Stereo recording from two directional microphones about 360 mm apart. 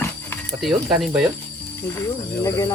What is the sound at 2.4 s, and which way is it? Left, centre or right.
Speech, centre.